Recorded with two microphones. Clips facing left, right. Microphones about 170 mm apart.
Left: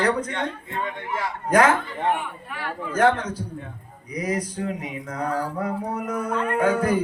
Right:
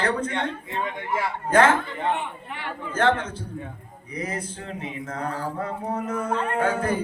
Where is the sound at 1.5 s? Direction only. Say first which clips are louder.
Even; 30° right (ahead or behind).